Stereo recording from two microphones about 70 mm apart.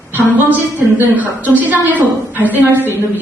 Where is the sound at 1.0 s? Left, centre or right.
Right.